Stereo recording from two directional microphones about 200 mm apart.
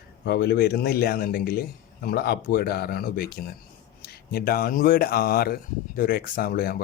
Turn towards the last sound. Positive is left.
turn(degrees=50)  # may be behind; listen again after turning